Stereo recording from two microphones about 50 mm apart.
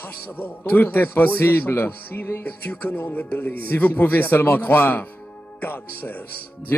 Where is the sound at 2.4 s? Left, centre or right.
Left.